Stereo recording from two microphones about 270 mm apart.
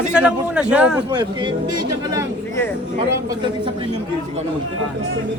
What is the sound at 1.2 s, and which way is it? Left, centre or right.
Speech, centre.